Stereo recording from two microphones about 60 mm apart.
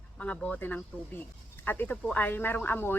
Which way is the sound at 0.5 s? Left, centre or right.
Left.